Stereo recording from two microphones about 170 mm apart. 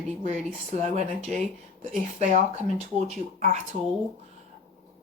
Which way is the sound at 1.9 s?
45° right (ahead or behind).